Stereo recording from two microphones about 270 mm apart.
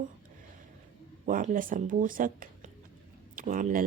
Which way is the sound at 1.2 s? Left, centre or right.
Right.